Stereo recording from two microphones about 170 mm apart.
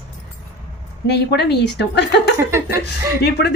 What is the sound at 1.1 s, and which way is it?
Speech, 80° left.